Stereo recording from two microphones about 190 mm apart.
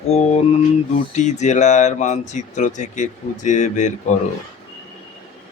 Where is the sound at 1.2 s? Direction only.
35° left (ahead or behind).